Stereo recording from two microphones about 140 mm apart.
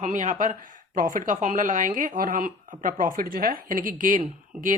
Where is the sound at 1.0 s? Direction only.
80° right.